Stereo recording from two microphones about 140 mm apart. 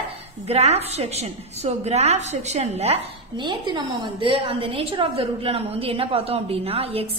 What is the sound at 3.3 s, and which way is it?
A woman's voice, 35° right (ahead or behind).